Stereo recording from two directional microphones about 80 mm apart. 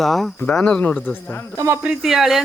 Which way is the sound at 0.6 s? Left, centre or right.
Centre.